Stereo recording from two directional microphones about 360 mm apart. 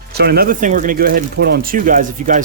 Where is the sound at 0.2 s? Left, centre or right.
Right.